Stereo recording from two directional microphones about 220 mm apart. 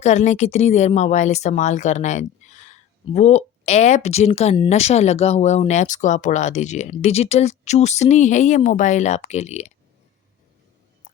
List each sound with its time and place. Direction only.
0.0 s speech: 30° left (ahead or behind)